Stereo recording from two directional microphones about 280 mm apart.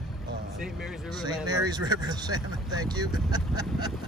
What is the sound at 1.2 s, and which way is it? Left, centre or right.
Speech, centre.